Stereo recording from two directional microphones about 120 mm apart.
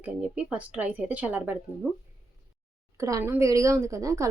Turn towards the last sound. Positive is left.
turn(degrees=-25)  # may be behind; listen again after turning